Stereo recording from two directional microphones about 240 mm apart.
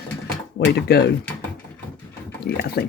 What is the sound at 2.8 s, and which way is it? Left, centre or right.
Speech, left.